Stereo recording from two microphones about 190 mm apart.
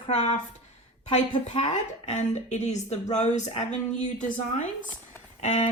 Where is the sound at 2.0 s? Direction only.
40° left (ahead or behind).